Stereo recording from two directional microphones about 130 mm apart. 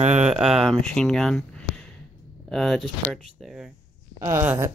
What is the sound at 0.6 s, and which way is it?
Speech, 5° left (ahead or behind).